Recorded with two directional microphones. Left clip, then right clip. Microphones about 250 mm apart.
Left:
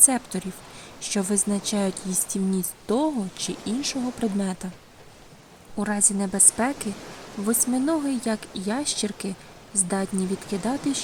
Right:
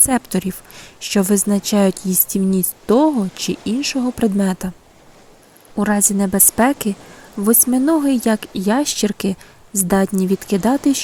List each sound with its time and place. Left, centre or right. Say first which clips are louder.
0.0 s speech: right 5 dB; right
5.7 s speech: right 8 dB; right